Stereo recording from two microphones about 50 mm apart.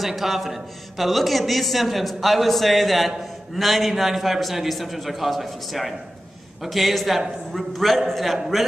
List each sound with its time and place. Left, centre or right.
0.0 s a man's voice: centre